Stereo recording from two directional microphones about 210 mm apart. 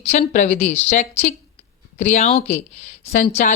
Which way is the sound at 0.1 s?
35° left (ahead or behind).